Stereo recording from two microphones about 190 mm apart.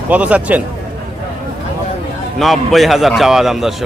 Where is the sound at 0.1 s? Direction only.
5° right (ahead or behind).